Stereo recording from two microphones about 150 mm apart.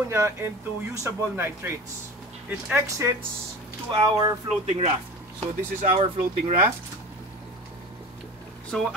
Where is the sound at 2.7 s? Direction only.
20° right (ahead or behind).